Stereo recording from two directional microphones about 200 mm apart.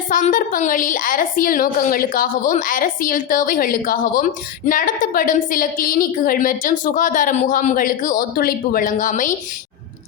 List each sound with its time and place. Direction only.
0.1 s a woman's voice: 40° left (ahead or behind)